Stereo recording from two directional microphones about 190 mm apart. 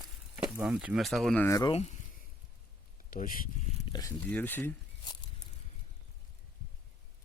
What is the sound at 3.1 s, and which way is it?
Speech, 50° left (ahead or behind).